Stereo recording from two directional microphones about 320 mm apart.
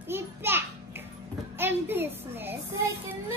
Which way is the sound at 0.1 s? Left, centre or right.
Centre.